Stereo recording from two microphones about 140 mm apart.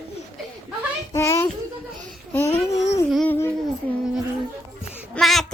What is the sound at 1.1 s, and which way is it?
Speech, 20° left (ahead or behind).